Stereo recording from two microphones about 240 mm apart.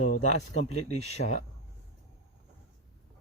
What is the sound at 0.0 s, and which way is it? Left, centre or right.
Speech, left.